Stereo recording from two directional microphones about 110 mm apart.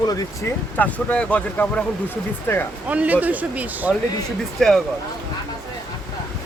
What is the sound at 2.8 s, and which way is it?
Speech, 15° right (ahead or behind).